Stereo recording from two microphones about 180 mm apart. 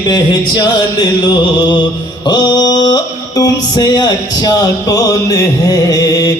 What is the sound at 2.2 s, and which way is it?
Music, 25° left (ahead or behind).